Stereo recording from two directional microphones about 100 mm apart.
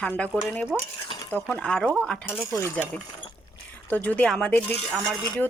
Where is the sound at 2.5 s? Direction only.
25° left (ahead or behind).